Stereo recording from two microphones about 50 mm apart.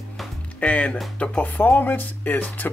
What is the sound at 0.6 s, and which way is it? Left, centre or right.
Speech, left.